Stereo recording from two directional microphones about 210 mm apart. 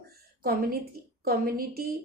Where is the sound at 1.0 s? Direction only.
45° right (ahead or behind).